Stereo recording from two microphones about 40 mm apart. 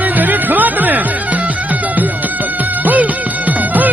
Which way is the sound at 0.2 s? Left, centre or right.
Right.